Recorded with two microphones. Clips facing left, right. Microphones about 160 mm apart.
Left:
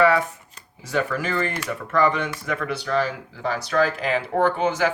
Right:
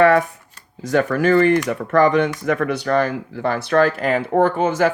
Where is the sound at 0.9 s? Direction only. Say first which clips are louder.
Right 8 dB; 60° right (ahead or behind).